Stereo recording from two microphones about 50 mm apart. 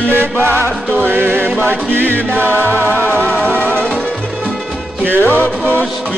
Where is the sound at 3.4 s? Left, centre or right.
Left.